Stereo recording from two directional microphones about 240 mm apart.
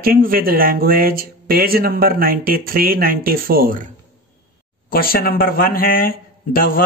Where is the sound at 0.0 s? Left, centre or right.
Right.